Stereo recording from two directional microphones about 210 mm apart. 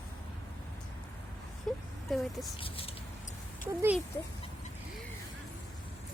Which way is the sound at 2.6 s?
25° left (ahead or behind).